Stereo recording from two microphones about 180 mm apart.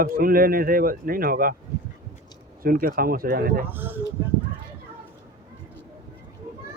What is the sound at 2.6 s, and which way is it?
A man's voice, 55° right (ahead or behind).